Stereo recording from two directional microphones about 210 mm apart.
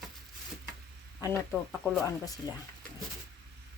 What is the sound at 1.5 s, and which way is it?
Speech, centre (ahead or behind).